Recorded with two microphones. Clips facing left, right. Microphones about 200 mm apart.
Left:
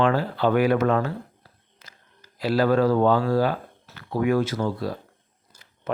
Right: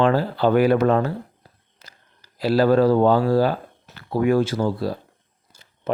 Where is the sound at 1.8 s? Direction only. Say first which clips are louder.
Right 1 dB; 35° right (ahead or behind).